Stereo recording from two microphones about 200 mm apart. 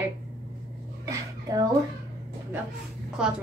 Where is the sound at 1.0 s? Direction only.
15° right (ahead or behind).